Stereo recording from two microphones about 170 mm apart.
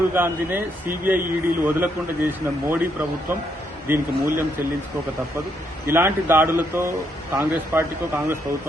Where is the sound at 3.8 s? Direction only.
15° right (ahead or behind).